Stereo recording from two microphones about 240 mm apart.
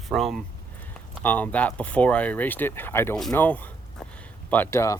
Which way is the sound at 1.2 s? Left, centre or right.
Centre.